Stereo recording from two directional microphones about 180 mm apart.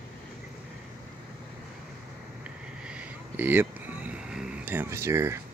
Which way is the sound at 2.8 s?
10° right (ahead or behind).